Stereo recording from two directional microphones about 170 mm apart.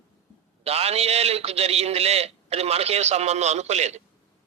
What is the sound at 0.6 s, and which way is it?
A man's voice, 35° right (ahead or behind).